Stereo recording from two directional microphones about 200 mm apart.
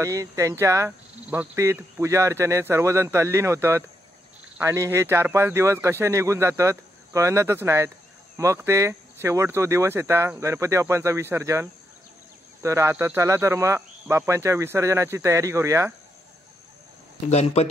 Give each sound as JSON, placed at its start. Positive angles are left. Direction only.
{"t": 0.0, "sound": "speech", "side_deg": -15}
{"t": 17.3, "sound": "speech", "side_deg": 35}